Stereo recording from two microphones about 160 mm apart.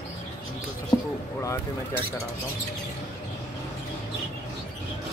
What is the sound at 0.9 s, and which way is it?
Speech, 30° left (ahead or behind).